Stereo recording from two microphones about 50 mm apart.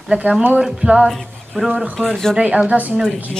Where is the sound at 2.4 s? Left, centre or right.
Right.